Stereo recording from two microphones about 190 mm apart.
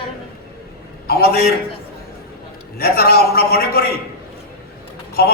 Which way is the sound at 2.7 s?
50° left (ahead or behind).